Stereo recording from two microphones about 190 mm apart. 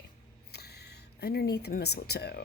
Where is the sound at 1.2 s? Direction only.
55° left (ahead or behind).